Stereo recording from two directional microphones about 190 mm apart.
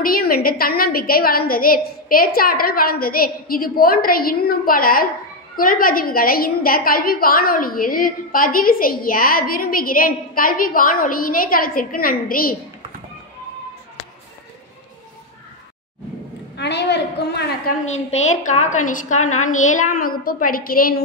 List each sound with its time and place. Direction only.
0.0 s a woman's voice: 50° left (ahead or behind)
16.5 s a woman's voice: 65° left (ahead or behind)
17.8 s a woman's voice: 35° left (ahead or behind)